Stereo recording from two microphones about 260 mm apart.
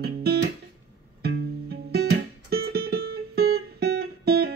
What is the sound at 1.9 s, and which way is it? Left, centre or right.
Music, right.